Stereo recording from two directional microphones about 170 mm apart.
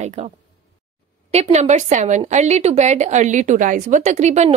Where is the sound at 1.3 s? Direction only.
40° right (ahead or behind).